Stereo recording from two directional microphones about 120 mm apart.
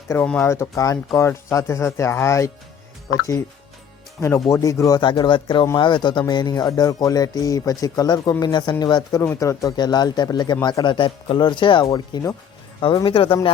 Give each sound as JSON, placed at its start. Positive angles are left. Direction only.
{"t": 0.1, "sound": "speech", "side_deg": 20}
{"t": 4.2, "sound": "speech", "side_deg": 25}
{"t": 13.1, "sound": "speech", "side_deg": 50}